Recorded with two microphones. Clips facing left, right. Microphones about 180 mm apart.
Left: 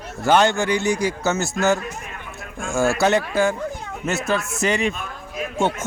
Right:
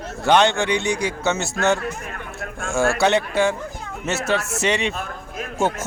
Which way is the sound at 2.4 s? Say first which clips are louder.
Even; 60° right (ahead or behind).